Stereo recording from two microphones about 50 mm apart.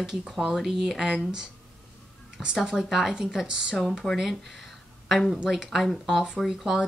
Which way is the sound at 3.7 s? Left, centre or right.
Centre.